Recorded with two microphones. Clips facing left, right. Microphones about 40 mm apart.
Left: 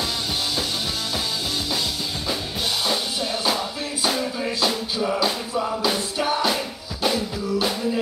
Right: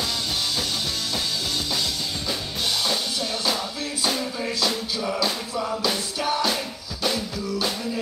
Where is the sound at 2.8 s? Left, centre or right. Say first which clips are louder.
Left 2 dB; centre.